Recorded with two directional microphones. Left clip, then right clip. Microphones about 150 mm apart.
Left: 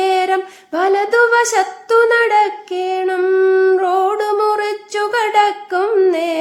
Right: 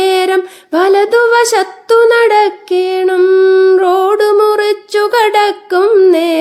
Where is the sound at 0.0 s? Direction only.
35° right (ahead or behind).